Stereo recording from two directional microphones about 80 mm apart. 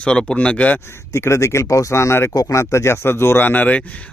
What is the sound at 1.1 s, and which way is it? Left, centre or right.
Speech, left.